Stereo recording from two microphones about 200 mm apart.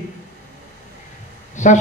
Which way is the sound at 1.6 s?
35° left (ahead or behind).